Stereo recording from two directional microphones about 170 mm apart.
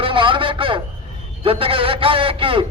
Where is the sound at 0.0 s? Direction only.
30° right (ahead or behind).